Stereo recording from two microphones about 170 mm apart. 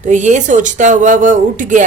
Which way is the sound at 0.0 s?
45° right (ahead or behind).